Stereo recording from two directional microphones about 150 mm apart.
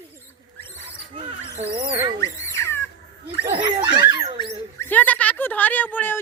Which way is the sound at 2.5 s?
20° left (ahead or behind).